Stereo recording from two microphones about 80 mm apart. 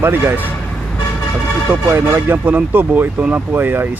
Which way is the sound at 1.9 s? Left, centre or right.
Right.